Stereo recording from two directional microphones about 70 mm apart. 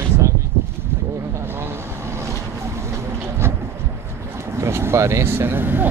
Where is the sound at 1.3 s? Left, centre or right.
Right.